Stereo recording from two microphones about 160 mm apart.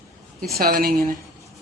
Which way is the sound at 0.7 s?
65° right (ahead or behind).